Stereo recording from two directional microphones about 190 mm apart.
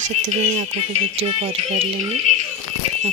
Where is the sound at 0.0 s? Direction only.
40° right (ahead or behind).